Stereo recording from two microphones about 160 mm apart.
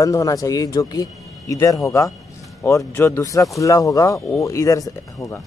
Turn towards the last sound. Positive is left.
turn(degrees=20)  # may be behind; listen again after turning